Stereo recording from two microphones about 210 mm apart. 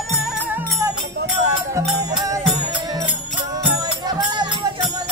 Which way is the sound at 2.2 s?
15° right (ahead or behind).